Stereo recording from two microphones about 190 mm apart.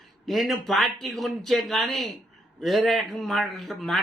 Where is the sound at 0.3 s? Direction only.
Centre (ahead or behind).